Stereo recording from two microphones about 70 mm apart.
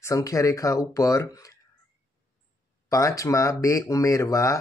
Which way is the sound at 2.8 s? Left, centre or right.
Left.